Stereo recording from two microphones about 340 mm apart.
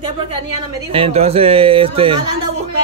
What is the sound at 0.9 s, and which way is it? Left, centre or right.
Speech, centre.